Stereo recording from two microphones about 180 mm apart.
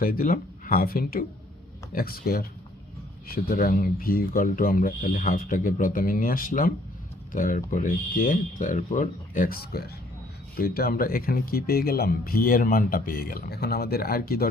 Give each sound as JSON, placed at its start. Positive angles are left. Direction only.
{"t": 0.0, "sound": "speech", "side_deg": 55}